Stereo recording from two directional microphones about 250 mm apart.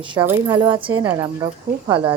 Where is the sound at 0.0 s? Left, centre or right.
Centre.